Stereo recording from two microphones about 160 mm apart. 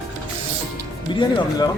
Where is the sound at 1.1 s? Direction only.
30° left (ahead or behind).